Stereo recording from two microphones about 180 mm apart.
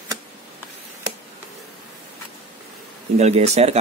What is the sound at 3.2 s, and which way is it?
Speech, 35° right (ahead or behind).